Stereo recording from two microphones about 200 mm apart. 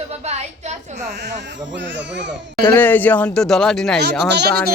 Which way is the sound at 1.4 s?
60° right (ahead or behind).